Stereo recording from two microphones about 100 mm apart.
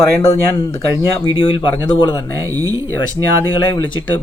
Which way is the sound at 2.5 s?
35° right (ahead or behind).